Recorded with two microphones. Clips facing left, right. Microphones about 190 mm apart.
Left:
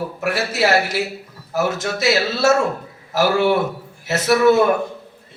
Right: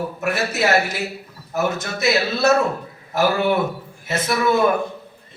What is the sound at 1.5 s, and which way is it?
Speech, 90° left.